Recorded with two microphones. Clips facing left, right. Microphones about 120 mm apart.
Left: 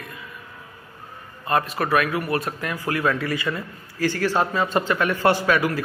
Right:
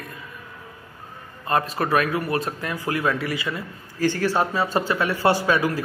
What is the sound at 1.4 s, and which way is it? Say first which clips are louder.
Speech: even; 30° right (ahead or behind).